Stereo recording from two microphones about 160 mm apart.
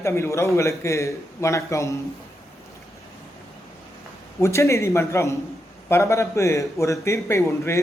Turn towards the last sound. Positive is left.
turn(degrees=15)  # may be behind; listen again after turning